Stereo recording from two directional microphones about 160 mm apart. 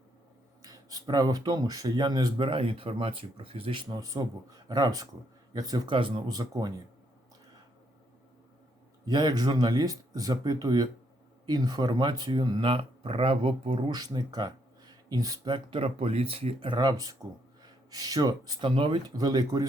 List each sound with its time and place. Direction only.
0.6 s speech: 20° right (ahead or behind)
9.0 s speech: 25° right (ahead or behind)